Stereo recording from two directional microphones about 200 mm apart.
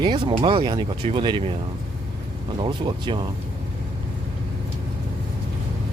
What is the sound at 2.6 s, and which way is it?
Speech, 25° right (ahead or behind).